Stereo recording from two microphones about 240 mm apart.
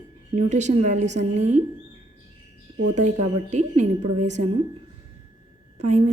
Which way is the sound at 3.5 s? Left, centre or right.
Right.